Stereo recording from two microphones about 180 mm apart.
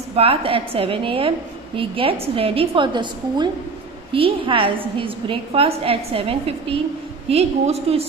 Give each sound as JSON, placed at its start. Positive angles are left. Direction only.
{"t": 0.1, "sound": "a woman's voice", "side_deg": -30}